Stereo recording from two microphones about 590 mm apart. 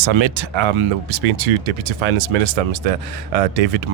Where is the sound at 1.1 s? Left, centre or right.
Right.